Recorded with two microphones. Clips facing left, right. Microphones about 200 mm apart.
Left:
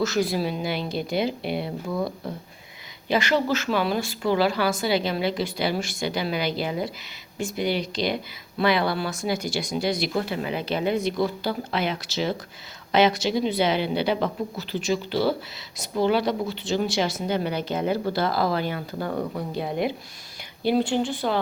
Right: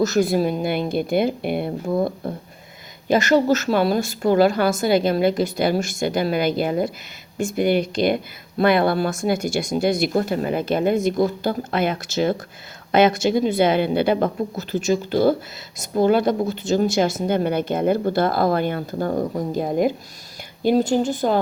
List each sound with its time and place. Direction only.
0.0 s speech: 45° right (ahead or behind)